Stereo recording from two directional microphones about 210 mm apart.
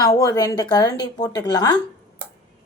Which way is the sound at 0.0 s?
15° left (ahead or behind).